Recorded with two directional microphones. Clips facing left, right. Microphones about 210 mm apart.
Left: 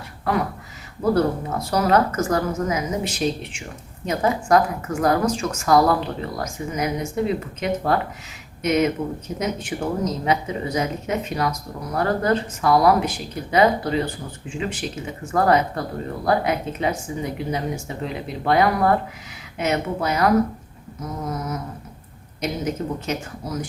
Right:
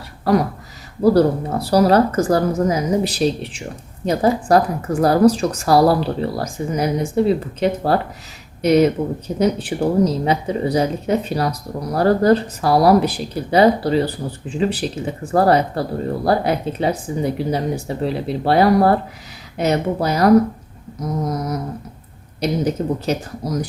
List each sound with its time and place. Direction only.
1.0 s speech: 35° right (ahead or behind)